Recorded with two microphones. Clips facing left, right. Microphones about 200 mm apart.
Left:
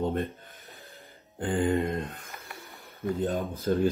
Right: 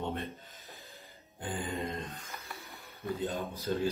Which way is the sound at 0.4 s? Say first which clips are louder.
Left 3 dB; 55° left (ahead or behind).